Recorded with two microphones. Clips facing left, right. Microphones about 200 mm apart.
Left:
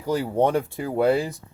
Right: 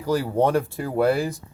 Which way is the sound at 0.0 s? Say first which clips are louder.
Right 1 dB; 20° left (ahead or behind).